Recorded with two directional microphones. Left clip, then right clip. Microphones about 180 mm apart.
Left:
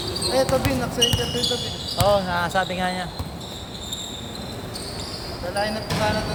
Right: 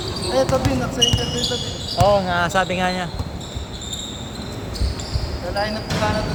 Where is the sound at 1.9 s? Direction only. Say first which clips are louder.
Right 3 dB; 25° right (ahead or behind).